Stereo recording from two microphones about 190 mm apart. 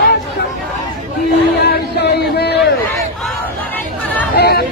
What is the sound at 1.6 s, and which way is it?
Chatter, 60° left (ahead or behind).